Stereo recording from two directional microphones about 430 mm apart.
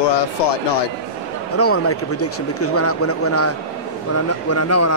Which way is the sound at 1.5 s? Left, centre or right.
Left.